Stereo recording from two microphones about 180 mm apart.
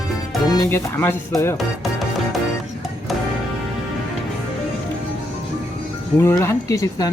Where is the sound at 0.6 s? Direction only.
15° left (ahead or behind).